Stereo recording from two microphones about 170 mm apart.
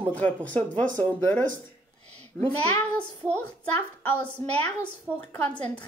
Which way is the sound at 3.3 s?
10° left (ahead or behind).